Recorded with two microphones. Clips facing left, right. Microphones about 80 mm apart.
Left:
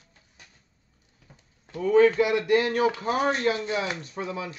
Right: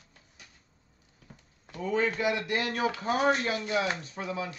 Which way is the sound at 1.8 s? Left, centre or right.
Left.